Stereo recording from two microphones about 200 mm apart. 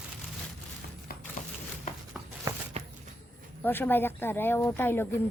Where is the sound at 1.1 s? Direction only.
45° left (ahead or behind).